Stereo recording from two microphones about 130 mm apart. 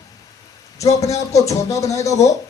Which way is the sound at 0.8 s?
25° left (ahead or behind).